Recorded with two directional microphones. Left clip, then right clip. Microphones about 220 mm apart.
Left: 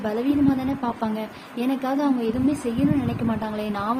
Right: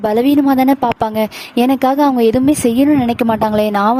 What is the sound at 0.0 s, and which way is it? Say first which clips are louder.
A woman's voice: right 10 dB; 55° right (ahead or behind).